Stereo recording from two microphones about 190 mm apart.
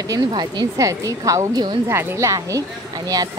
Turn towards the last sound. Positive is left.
turn(degrees=-20)  # may be behind; listen again after turning